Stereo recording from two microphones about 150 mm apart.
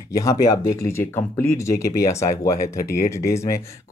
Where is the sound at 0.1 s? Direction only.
20° left (ahead or behind).